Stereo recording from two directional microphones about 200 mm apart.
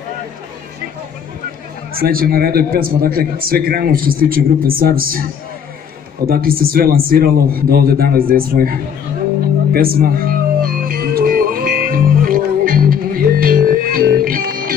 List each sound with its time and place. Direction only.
2.0 s a man's voice: 45° right (ahead or behind)
6.2 s a man's voice: 45° right (ahead or behind)
9.7 s music: 45° right (ahead or behind)